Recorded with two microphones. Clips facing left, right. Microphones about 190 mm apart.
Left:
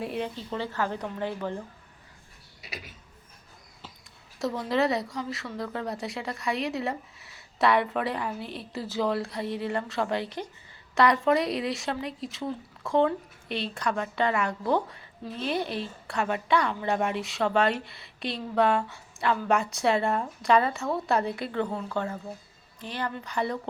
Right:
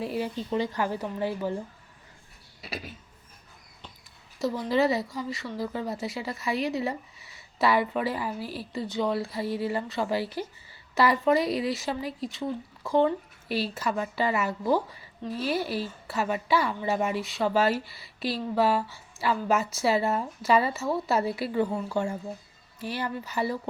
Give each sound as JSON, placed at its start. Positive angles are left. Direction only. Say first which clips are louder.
{"t": 0.0, "sound": "speech", "louder": "right 1 dB", "side_deg": 0}
{"t": 0.3, "sound": "a woman's voice", "louder": "right 3 dB", "side_deg": -15}
{"t": 2.6, "sound": "speech", "louder": "right 5 dB", "side_deg": -30}
{"t": 4.4, "sound": "a woman's voice", "louder": "right 1 dB", "side_deg": 0}